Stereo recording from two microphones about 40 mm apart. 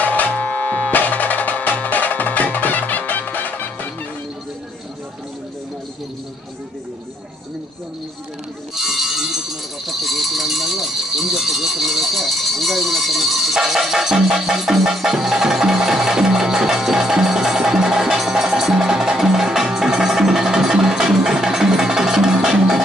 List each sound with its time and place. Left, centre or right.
0.0 s music: left
8.7 s music: centre
10.0 s rattle: centre